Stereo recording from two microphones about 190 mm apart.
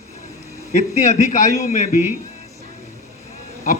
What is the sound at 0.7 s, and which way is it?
A man's voice, 40° left (ahead or behind).